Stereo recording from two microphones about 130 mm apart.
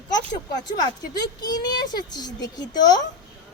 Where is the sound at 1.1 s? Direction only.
30° left (ahead or behind).